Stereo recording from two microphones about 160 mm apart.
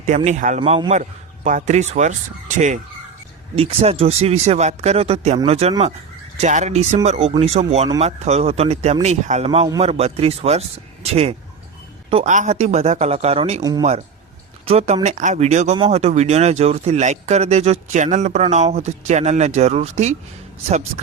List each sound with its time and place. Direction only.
0.3 s speech: 50° right (ahead or behind)
3.5 s speech: 35° right (ahead or behind)
13.6 s speech: 20° right (ahead or behind)
14.6 s speech: 40° right (ahead or behind)
15.0 s speech: 50° right (ahead or behind)